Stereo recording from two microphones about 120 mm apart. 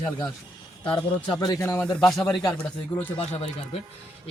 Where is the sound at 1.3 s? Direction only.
40° left (ahead or behind).